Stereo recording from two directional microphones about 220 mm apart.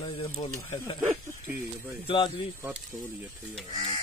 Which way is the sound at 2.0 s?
20° left (ahead or behind).